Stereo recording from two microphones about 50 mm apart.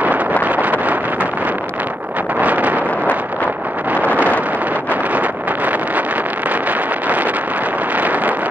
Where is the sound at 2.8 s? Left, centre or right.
Left.